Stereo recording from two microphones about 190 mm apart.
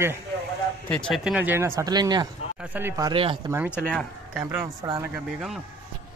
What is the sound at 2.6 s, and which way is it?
Speech, 10° right (ahead or behind).